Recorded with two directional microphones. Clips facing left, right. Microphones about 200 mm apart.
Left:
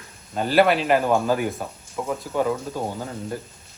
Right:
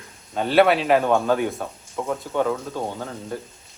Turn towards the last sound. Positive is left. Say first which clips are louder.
# left 1 dB
turn(degrees=5)  # may be behind; listen again after turning